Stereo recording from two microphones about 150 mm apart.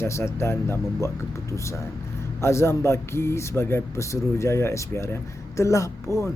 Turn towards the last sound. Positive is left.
turn(degrees=20)  # may be behind; listen again after turning